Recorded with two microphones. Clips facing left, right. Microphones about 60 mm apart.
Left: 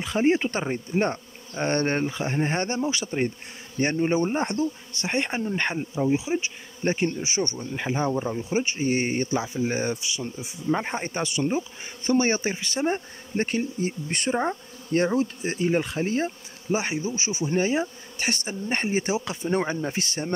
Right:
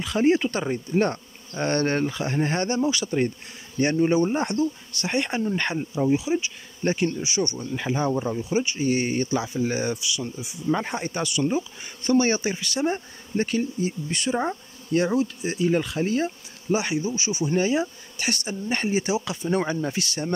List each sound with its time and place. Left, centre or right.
0.0 s speech: left; by 6.1 s centre
6.1 s speech: left
9.3 s speech: centre
9.7 s speech: left
14.3 s speech: left
15.1 s speech: left
19.4 s speech: left